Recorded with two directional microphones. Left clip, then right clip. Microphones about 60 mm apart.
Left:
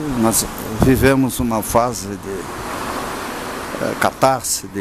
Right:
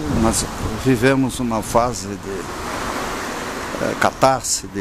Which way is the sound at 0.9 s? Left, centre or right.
Centre.